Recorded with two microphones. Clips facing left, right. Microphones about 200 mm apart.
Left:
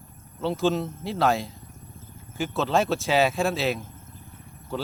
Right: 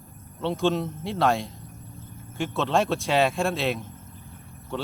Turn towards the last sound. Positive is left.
turn(degrees=5)  # may be behind; listen again after turning